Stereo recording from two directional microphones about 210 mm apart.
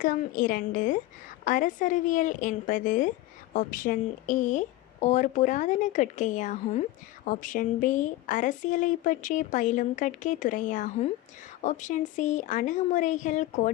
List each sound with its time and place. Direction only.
0.0 s a woman's voice: 40° left (ahead or behind)